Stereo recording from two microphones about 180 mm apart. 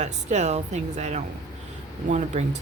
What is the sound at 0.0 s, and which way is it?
Speech, 40° right (ahead or behind).